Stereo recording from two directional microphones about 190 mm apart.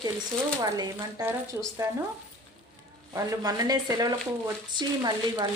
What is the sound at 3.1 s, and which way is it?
Speech, 20° right (ahead or behind).